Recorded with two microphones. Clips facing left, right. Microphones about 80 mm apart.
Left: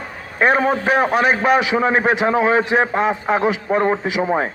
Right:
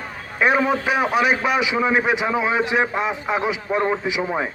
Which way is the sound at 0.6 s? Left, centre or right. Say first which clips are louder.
Left 3 dB; left.